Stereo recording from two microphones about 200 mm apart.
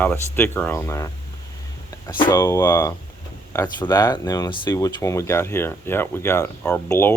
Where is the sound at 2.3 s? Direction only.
15° left (ahead or behind).